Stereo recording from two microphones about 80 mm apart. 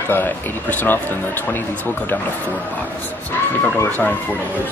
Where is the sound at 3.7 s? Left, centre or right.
Left.